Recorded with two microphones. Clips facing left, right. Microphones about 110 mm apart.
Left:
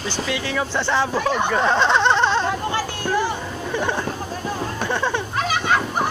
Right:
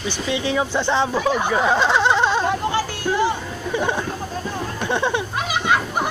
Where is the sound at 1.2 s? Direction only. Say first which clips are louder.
Even; 5° right (ahead or behind).